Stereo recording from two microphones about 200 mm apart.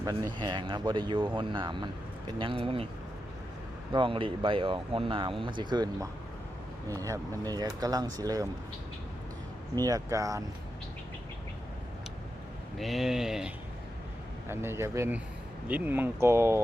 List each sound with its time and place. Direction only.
0.3 s speech: 25° right (ahead or behind)
3.9 s speech: 25° right (ahead or behind)
9.7 s speech: 20° right (ahead or behind)
12.7 s speech: centre (ahead or behind)
14.5 s speech: 10° right (ahead or behind)